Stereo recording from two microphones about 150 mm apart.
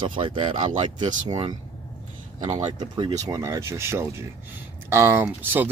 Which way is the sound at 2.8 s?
30° right (ahead or behind).